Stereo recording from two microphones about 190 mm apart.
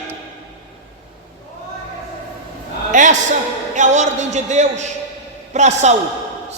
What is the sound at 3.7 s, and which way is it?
A man's voice, 40° right (ahead or behind).